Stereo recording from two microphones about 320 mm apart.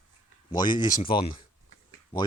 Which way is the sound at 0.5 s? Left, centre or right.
Centre.